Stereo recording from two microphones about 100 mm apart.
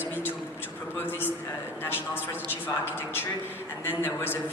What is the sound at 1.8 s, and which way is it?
A man's voice, 20° left (ahead or behind).